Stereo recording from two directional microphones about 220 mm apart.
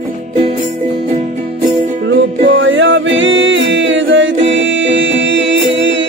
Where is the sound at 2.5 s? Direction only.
55° right (ahead or behind).